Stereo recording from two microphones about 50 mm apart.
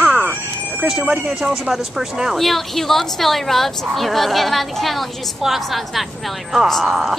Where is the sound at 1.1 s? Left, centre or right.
Centre.